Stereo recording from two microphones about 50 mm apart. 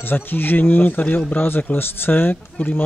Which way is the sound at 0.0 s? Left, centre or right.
Left.